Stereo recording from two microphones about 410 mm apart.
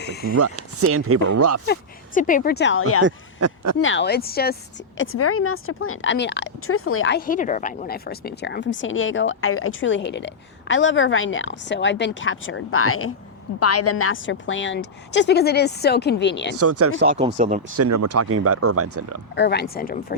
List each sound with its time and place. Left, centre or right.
0.0 s a woman's voice: left
0.3 s speech: right
1.6 s a woman's voice: left
3.0 s speech: right
3.8 s a woman's voice: left
16.6 s speech: right; by 17.6 s centre
17.7 s speech: right
19.4 s a woman's voice: left